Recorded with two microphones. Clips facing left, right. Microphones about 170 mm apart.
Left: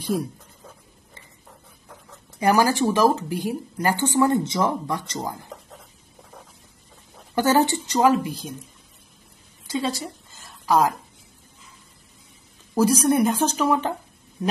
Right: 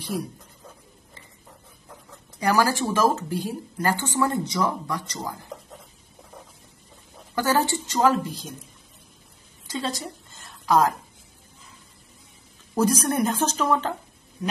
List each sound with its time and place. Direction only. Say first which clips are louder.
2.4 s speech: left 3 dB; 20° left (ahead or behind)
7.3 s speech: left 4 dB; 20° left (ahead or behind)
9.7 s a sound: left 4 dB; 10° left (ahead or behind)
12.7 s speech: left 4 dB; 10° left (ahead or behind)